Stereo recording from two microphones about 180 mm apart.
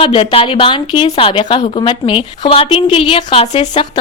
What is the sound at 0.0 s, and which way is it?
A woman's voice, 30° left (ahead or behind).